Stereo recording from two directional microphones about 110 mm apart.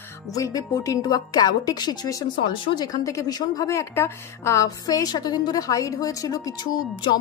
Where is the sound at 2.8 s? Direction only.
30° left (ahead or behind).